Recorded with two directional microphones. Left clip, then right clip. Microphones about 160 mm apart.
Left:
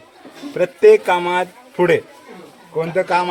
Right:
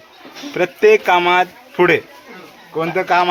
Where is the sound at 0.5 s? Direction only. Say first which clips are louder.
Left 1 dB; 20° right (ahead or behind).